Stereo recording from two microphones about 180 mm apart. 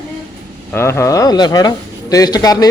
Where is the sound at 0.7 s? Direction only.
15° left (ahead or behind).